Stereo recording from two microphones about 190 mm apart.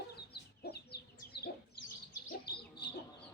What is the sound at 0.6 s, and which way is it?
Chicken, 55° left (ahead or behind).